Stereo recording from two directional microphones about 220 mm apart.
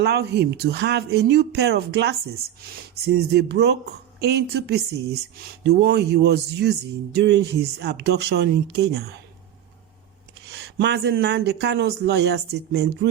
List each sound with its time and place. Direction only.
0.0 s speech: 50° right (ahead or behind)
10.5 s speech: 50° right (ahead or behind)